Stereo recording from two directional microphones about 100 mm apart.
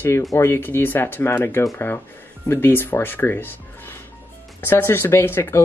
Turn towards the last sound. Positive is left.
turn(degrees=25)  # may be behind; listen again after turning